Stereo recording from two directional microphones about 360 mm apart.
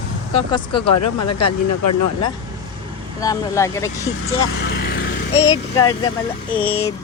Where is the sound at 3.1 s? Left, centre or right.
Centre.